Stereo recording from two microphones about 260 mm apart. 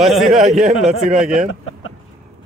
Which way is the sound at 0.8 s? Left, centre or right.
Centre.